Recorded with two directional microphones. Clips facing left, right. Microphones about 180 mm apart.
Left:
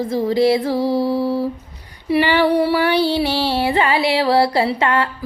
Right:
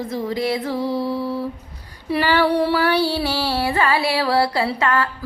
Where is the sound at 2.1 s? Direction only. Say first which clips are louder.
Left 3 dB; 10° left (ahead or behind).